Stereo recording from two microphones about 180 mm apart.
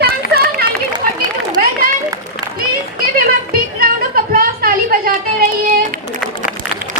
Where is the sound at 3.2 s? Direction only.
55° right (ahead or behind).